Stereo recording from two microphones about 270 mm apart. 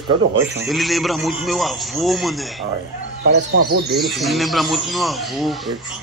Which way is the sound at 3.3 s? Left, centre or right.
Right.